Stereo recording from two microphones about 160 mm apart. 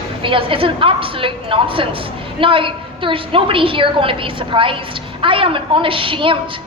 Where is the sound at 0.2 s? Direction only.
35° right (ahead or behind).